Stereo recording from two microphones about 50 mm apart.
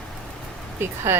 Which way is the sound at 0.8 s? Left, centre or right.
Right.